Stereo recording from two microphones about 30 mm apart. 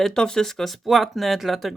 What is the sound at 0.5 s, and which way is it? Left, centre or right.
Speech, centre.